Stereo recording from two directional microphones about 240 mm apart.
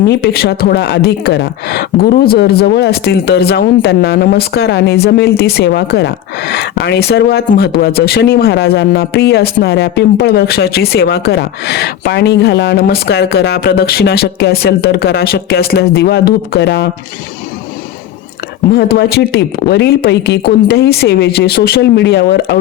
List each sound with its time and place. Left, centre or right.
0.1 s a woman's voice: left
18.7 s speech: left